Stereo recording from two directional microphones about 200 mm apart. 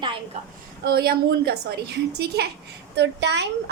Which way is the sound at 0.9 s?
50° right (ahead or behind).